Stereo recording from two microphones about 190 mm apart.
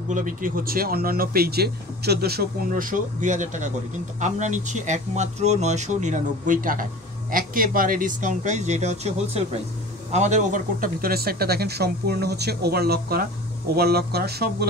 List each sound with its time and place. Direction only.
0.1 s speech: 45° right (ahead or behind)